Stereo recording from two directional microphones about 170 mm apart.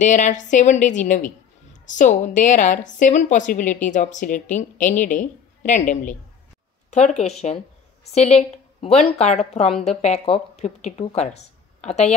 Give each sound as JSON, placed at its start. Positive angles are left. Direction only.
{"t": 0.0, "sound": "a woman's voice", "side_deg": 45}